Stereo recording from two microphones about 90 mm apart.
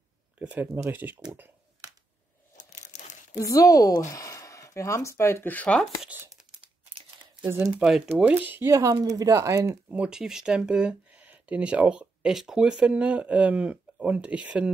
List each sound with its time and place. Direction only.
0.4 s speech: 15° right (ahead or behind)
3.3 s speech: 40° left (ahead or behind); by 5.9 s 15° left (ahead or behind)
7.6 s speech: 5° right (ahead or behind)
8.4 s speech: 25° right (ahead or behind)
9.0 s speech: 40° right (ahead or behind)
9.8 s speech: 10° right (ahead or behind)